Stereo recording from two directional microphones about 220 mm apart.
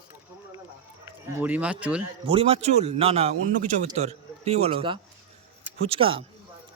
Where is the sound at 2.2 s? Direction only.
25° right (ahead or behind).